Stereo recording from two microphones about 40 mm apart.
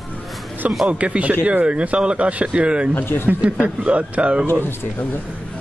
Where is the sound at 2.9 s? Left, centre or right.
Left.